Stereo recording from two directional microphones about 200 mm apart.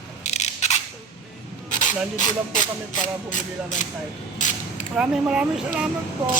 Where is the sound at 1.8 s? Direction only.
40° left (ahead or behind).